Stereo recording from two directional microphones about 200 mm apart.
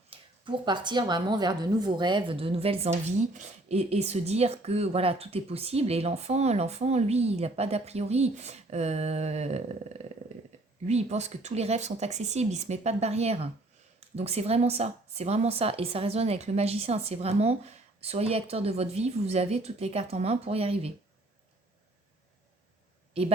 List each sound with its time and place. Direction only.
0.1 s speech: 25° right (ahead or behind)